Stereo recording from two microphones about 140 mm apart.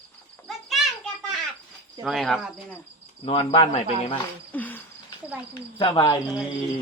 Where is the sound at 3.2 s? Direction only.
40° left (ahead or behind).